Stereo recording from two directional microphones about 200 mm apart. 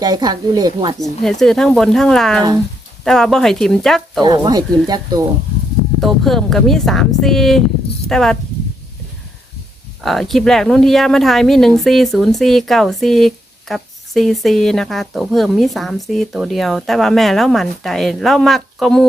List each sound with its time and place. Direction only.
0.0 s speech: 20° right (ahead or behind)
1.2 s speech: centre (ahead or behind)
4.2 s speech: 20° right (ahead or behind)
6.0 s speech: centre (ahead or behind)
10.0 s speech: centre (ahead or behind)